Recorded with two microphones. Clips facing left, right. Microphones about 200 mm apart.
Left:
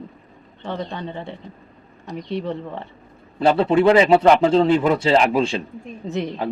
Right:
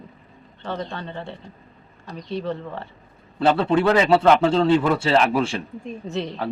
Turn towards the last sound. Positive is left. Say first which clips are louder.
# left 2 dB
turn(degrees=20)  # may be behind; listen again after turning